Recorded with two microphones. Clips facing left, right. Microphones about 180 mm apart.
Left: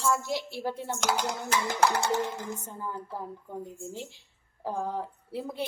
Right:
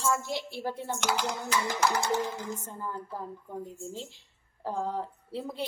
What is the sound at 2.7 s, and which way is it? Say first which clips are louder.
A woman's voice: even; 15° left (ahead or behind).